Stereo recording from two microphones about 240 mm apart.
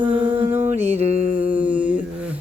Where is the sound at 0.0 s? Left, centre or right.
Right.